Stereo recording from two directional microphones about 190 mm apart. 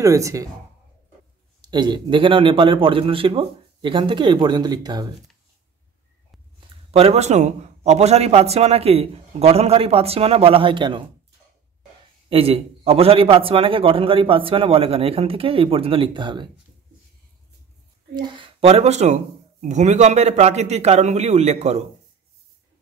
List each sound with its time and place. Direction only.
0.0 s a woman's voice: 15° right (ahead or behind)
1.6 s a man's voice: 25° right (ahead or behind)
6.6 s a man's voice: 30° right (ahead or behind)
12.3 s a man's voice: 30° right (ahead or behind)
18.1 s a man's voice: 25° right (ahead or behind)